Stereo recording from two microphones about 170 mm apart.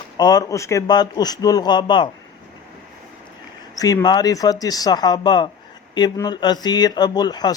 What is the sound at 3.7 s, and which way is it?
Speech, 20° left (ahead or behind).